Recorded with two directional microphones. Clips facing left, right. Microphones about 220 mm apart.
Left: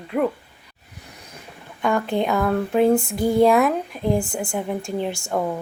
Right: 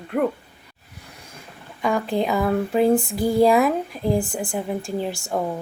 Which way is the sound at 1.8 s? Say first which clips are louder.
Left 1 dB; centre (ahead or behind).